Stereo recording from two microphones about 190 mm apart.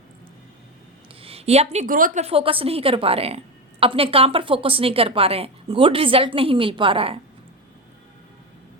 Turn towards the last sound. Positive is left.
turn(degrees=-30)  # may be behind; listen again after turning